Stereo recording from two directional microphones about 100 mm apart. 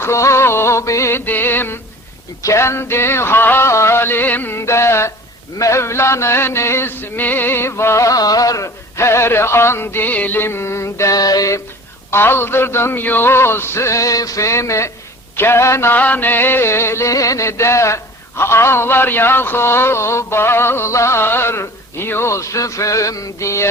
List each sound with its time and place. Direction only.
0.0 s music: 30° left (ahead or behind)
12.1 s music: 25° left (ahead or behind)